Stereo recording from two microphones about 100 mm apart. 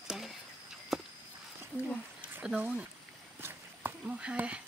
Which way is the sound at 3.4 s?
20° right (ahead or behind).